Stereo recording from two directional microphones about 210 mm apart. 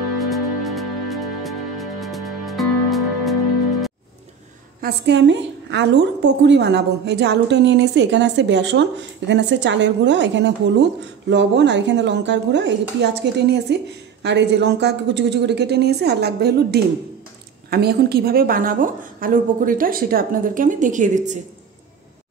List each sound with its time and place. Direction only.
0.2 s music: centre (ahead or behind)
4.8 s a woman's voice: 55° right (ahead or behind); by 21.4 s 35° right (ahead or behind)